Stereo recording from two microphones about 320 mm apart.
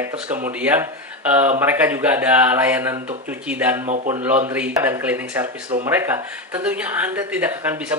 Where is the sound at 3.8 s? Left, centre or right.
Right.